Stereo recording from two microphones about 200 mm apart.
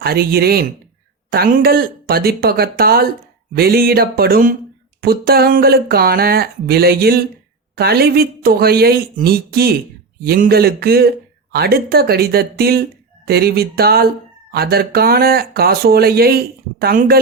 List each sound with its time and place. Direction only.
0.0 s speech: 50° right (ahead or behind)